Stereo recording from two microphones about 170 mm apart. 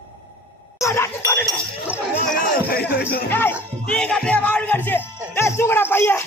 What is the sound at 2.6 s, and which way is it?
Music, 60° left (ahead or behind).